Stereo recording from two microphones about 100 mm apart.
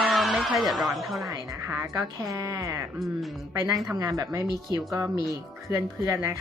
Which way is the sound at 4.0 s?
35° right (ahead or behind).